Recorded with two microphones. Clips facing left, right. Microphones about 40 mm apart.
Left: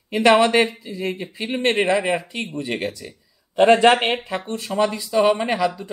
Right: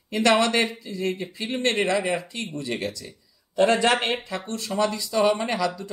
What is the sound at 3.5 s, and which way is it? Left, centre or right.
Speech, left.